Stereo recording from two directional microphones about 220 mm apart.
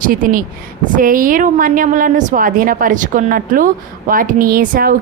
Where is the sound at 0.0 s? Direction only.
40° right (ahead or behind).